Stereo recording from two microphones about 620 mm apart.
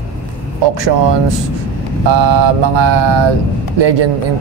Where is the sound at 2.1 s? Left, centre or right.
Right.